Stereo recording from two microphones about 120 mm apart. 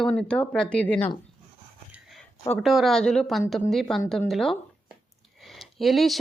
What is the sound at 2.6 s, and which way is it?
A woman's voice, centre (ahead or behind).